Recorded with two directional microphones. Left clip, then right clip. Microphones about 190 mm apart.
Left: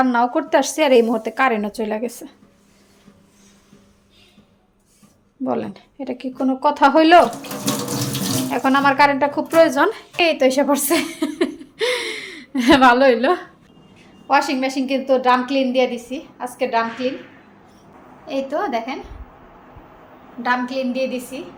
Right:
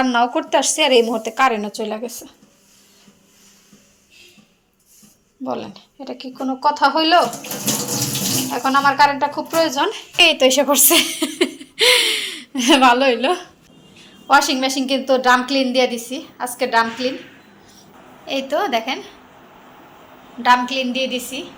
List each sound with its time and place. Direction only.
0.0 s a woman's voice: 20° left (ahead or behind); by 2.3 s 35° left (ahead or behind)
5.5 s a woman's voice: 40° left (ahead or behind)
8.4 s speech: 40° left (ahead or behind)
9.9 s speech: 20° left (ahead or behind)
12.5 s a woman's voice: 25° left (ahead or behind)
14.3 s a woman's voice: 5° left (ahead or behind)
18.3 s a woman's voice: centre (ahead or behind)
20.4 s a woman's voice: 5° left (ahead or behind)